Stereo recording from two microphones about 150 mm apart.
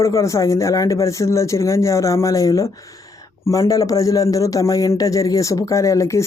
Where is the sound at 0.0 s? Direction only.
20° left (ahead or behind).